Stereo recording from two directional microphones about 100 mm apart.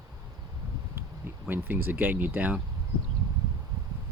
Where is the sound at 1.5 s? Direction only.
20° right (ahead or behind).